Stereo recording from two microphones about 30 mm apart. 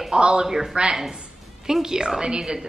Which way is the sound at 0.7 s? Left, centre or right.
Right.